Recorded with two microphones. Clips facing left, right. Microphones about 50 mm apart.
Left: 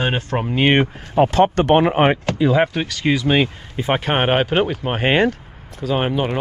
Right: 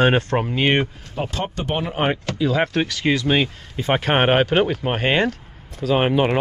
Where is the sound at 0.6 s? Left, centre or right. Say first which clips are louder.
Left 5 dB; left.